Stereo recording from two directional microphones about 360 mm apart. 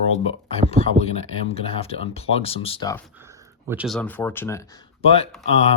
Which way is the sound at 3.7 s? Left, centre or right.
Centre.